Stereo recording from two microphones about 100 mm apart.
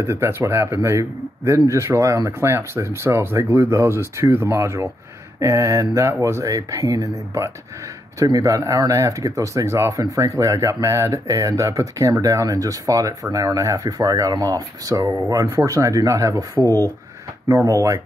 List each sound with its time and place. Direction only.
0.0 s a man's voice: 25° right (ahead or behind)